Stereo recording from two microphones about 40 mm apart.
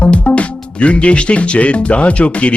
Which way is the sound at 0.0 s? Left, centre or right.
Left.